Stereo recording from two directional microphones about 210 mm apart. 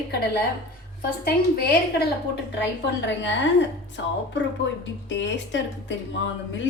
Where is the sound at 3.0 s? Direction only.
60° left (ahead or behind).